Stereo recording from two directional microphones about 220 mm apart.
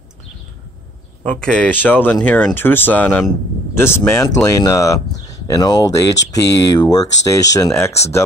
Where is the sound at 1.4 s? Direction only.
5° left (ahead or behind).